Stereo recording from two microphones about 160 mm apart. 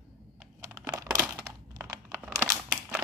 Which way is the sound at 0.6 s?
20° right (ahead or behind).